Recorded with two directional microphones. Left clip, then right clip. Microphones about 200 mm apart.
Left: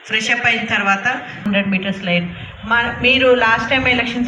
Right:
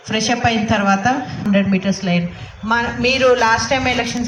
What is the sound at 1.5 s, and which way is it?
A man's voice, 15° right (ahead or behind).